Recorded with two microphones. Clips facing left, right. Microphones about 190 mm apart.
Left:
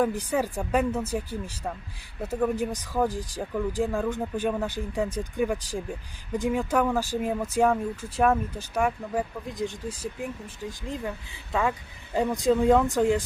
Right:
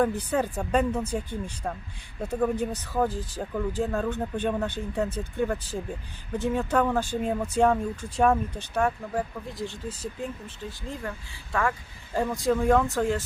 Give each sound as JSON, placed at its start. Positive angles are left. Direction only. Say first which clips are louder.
{"t": 0.0, "sound": "speech", "louder": "even", "side_deg": 10}